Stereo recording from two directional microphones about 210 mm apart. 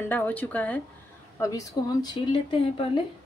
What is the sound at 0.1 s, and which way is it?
Speech, 10° left (ahead or behind).